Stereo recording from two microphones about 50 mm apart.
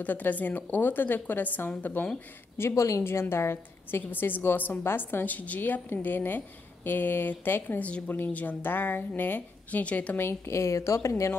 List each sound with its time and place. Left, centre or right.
0.0 s speech: left
2.7 s a woman's voice: left
3.0 s a woman's voice: left
4.1 s a woman's voice: left
5.2 s speech: left
8.6 s speech: left
10.1 s a woman's voice: left
10.5 s a woman's voice: left